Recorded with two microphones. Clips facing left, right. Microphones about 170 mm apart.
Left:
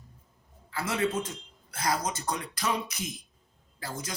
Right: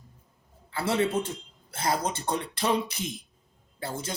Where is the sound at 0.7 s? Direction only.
30° right (ahead or behind).